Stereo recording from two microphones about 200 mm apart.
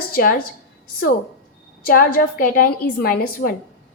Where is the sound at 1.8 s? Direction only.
45° left (ahead or behind).